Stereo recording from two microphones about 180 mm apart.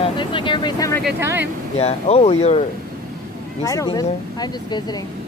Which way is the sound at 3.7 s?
20° left (ahead or behind).